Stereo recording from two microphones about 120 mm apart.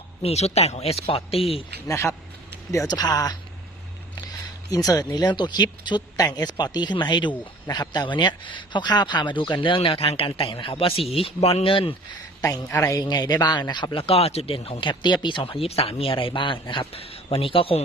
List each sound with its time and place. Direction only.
0.2 s a man's voice: 60° left (ahead or behind)
1.9 s speech: 25° left (ahead or behind)
2.7 s speech: 35° left (ahead or behind)
4.7 s a man's voice: 30° left (ahead or behind); by 11.9 s 50° left (ahead or behind)
12.4 s a man's voice: 25° left (ahead or behind); by 17.8 s 50° left (ahead or behind)